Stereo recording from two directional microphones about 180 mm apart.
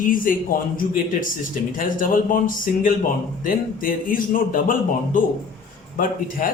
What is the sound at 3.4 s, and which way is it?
Speech, 50° left (ahead or behind).